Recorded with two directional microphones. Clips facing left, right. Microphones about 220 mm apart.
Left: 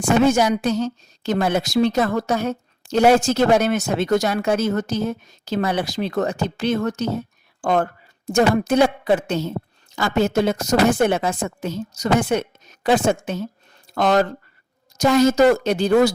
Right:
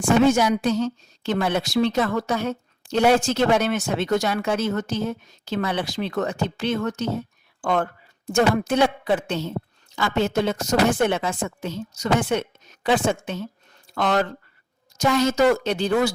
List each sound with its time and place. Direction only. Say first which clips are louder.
0.3 s a woman's voice: left 1 dB; 40° left (ahead or behind)